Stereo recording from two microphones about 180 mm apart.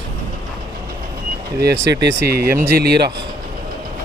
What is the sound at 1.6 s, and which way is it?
Speech, 70° right (ahead or behind).